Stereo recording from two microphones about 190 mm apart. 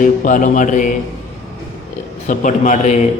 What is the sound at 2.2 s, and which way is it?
Speech, 40° left (ahead or behind).